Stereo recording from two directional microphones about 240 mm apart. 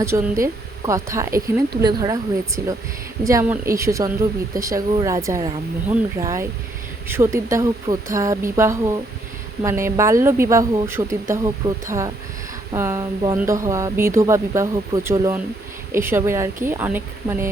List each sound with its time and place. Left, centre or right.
0.0 s speech: centre
3.2 s speech: centre